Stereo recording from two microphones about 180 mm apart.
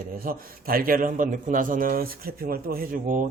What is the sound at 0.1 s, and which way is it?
A man's voice, 55° right (ahead or behind).